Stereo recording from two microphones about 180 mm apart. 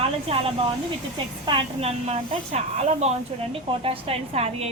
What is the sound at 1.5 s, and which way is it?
A woman's voice, 30° right (ahead or behind).